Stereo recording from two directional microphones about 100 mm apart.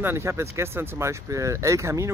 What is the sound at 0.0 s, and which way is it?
Speech, 25° right (ahead or behind).